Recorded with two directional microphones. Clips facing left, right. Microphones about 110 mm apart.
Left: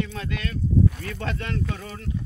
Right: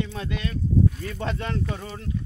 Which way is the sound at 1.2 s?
20° right (ahead or behind).